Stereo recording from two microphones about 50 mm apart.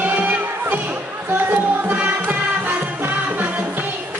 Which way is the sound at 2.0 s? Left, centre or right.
Right.